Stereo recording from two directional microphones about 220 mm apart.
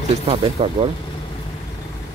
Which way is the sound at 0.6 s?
25° right (ahead or behind).